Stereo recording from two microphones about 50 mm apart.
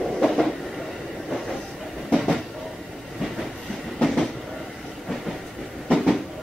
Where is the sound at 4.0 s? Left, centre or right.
Centre.